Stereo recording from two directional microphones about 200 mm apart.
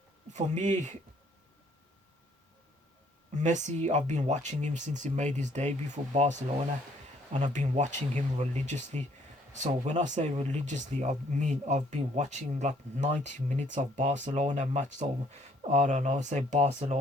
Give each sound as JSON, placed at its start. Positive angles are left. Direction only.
{"t": 0.3, "sound": "speech", "side_deg": -35}
{"t": 3.3, "sound": "speech", "side_deg": -35}